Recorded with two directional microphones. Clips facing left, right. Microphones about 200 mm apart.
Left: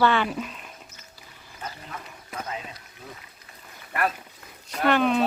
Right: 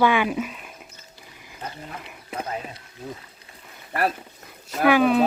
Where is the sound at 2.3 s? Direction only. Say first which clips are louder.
Right 4 dB; 30° right (ahead or behind).